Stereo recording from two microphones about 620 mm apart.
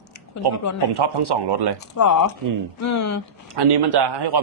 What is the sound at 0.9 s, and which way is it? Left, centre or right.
Speech, right.